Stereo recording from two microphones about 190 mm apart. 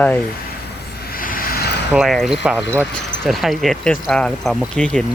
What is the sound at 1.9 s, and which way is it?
Speech, centre (ahead or behind).